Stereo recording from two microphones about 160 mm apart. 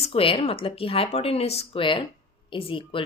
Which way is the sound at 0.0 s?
35° left (ahead or behind).